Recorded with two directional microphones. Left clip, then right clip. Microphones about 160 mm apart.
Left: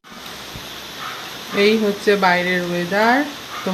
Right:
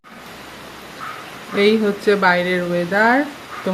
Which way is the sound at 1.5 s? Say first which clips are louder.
Even; 5° right (ahead or behind).